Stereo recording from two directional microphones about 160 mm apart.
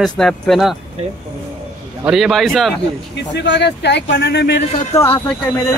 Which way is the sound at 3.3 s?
90° left.